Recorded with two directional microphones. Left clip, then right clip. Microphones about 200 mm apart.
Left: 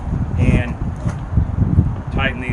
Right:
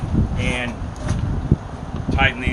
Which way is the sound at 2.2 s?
20° left (ahead or behind).